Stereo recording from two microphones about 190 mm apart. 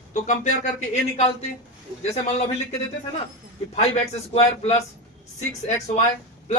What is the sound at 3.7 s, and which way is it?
A man's voice, 35° left (ahead or behind).